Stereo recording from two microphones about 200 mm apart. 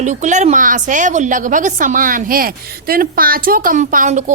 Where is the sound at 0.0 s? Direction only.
35° right (ahead or behind).